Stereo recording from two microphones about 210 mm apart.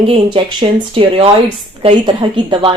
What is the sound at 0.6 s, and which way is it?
A woman's voice, 20° right (ahead or behind).